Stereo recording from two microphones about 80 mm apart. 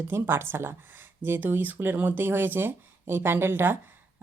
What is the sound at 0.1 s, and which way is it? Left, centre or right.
A woman's voice, right.